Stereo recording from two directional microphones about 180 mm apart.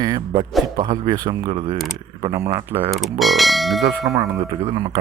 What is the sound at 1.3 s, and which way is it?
Speech, 30° right (ahead or behind).